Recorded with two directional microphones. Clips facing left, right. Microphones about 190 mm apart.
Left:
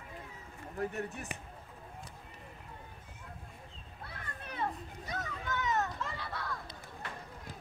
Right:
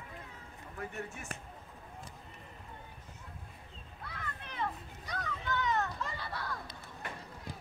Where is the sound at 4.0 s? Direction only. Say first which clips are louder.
Right 2 dB; 30° left (ahead or behind).